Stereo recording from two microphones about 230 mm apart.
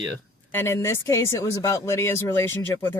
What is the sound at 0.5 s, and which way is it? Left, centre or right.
Speech, centre.